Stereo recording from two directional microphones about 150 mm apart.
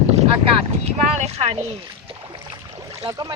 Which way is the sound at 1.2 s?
45° right (ahead or behind).